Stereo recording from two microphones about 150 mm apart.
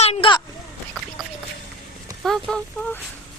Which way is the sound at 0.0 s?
40° left (ahead or behind).